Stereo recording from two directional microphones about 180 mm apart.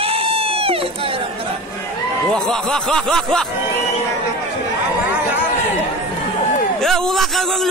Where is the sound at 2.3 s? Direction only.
5° left (ahead or behind).